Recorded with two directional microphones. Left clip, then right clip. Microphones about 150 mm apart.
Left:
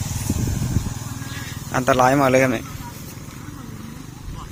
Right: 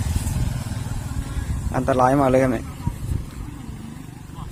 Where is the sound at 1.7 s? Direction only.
Centre (ahead or behind).